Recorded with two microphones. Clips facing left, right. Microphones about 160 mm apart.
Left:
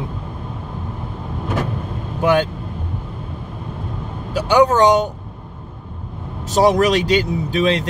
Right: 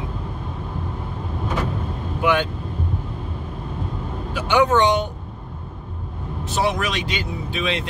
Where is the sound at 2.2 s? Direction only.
40° left (ahead or behind).